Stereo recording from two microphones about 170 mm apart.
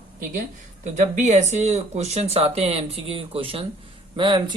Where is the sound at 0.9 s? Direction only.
45° right (ahead or behind).